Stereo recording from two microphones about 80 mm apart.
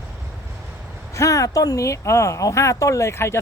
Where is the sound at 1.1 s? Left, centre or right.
Left.